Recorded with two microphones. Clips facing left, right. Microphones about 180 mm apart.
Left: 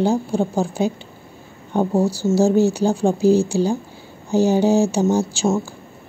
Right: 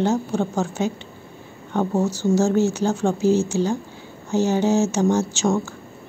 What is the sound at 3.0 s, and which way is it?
Speech, 35° left (ahead or behind).